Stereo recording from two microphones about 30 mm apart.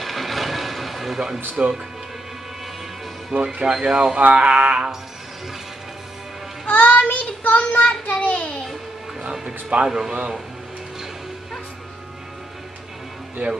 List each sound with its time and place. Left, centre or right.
0.0 s a sound: centre
1.6 s speech: right
3.3 s a sound: right
3.6 s speech: right
3.9 s speech: right
4.3 s a sound: right
6.7 s child singing: left
7.8 s child singing: left
8.2 s a child's voice: left
9.3 s speech: centre
13.4 s speech: right